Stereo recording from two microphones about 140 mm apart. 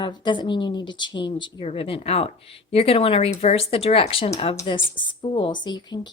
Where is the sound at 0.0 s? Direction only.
35° left (ahead or behind).